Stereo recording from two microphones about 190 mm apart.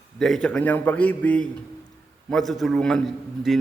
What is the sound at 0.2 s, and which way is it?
A man's voice, 5° left (ahead or behind).